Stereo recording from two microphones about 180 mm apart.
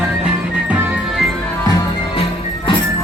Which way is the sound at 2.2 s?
30° left (ahead or behind).